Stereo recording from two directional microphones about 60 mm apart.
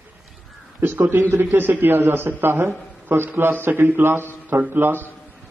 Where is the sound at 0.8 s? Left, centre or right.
Right.